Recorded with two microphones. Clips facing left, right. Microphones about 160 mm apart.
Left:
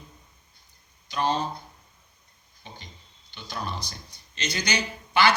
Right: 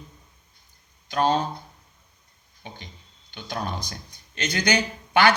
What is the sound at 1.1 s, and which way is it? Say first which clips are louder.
Speech: right 4 dB; 55° right (ahead or behind).